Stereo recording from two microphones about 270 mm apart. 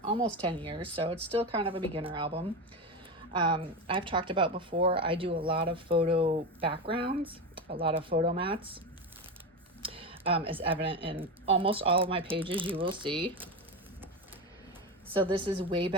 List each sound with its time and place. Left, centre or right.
0.4 s a woman's voice: centre
9.8 s speech: centre
15.2 s a woman's voice: centre